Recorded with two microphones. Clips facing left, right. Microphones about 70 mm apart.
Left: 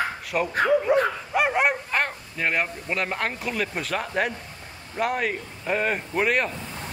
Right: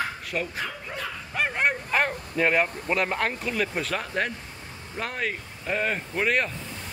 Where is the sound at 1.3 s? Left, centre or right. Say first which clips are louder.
Left 1 dB; centre.